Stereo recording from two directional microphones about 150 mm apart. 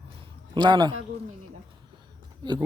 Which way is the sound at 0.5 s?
30° right (ahead or behind).